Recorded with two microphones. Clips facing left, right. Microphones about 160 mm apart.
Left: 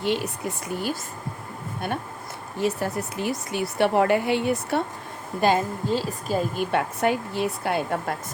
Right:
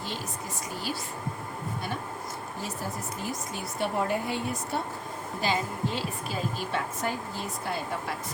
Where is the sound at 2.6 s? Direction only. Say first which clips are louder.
Left 12 dB; 70° left (ahead or behind).